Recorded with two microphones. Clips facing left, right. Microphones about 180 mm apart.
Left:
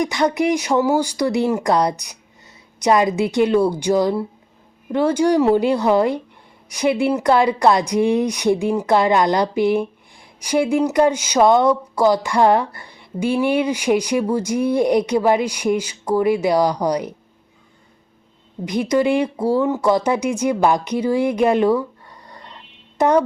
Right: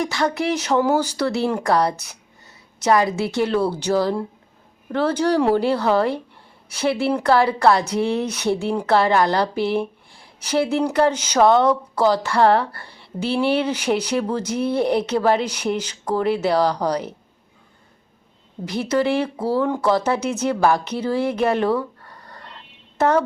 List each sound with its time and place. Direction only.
0.0 s speech: 15° left (ahead or behind)
18.6 s speech: 15° left (ahead or behind)